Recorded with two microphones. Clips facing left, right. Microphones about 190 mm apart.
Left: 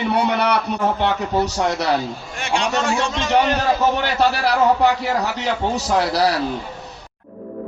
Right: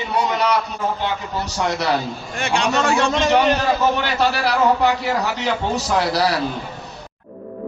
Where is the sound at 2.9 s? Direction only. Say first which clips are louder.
Right 4 dB; 60° right (ahead or behind).